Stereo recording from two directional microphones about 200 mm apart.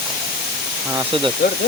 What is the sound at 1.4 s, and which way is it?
Speech, 50° left (ahead or behind).